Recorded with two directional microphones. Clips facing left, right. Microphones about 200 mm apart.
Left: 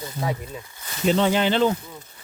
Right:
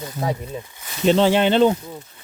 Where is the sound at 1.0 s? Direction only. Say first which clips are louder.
Right 4 dB; 30° right (ahead or behind).